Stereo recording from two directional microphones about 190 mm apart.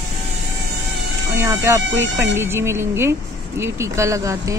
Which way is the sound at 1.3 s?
15° right (ahead or behind).